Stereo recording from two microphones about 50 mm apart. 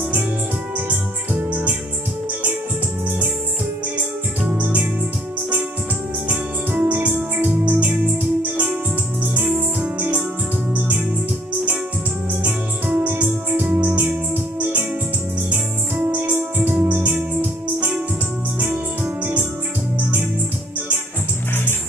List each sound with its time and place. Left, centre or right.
1.5 s music: right
4.5 s music: right
6.2 s music: right
12.4 s organ: right
13.3 s music: right
18.6 s organ: right